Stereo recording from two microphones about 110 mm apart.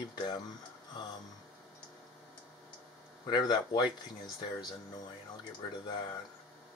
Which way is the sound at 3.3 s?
40° left (ahead or behind).